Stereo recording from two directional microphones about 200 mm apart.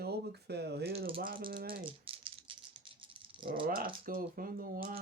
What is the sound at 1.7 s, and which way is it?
Rattle, 25° right (ahead or behind).